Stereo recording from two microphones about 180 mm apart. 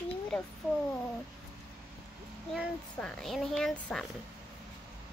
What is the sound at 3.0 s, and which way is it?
A woman's voice, 5° left (ahead or behind).